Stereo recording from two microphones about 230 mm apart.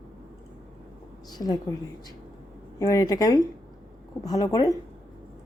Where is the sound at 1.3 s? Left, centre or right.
Centre.